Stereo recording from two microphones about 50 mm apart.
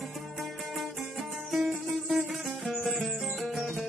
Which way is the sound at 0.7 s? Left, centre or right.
Centre.